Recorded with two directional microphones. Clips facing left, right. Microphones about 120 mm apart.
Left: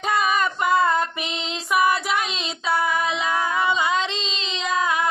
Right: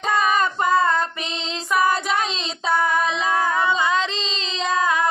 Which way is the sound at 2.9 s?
35° right (ahead or behind).